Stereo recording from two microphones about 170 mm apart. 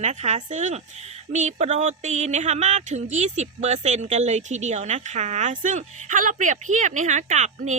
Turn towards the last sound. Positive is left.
turn(degrees=-45)  # may be behind; listen again after turning